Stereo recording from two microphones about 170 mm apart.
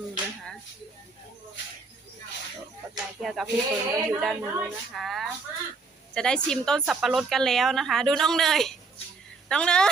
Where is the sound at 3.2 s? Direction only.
Centre (ahead or behind).